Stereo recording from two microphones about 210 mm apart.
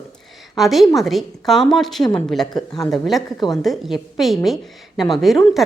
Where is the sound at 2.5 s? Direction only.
20° left (ahead or behind).